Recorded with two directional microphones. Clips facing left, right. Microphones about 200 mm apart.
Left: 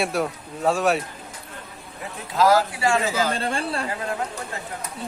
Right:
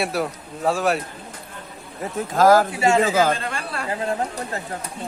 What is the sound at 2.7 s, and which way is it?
Speech, 25° right (ahead or behind).